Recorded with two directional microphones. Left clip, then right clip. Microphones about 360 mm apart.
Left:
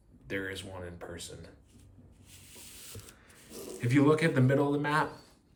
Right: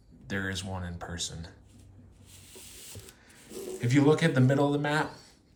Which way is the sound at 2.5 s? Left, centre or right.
Centre.